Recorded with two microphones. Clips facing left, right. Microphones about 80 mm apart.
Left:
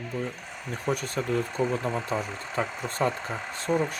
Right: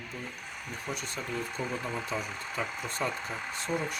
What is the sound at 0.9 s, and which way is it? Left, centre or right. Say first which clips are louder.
Speech: left 10 dB; left.